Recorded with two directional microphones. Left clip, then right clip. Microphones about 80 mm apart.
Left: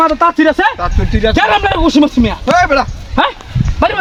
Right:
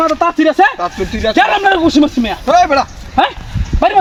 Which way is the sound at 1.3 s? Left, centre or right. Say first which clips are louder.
Right 2 dB; left.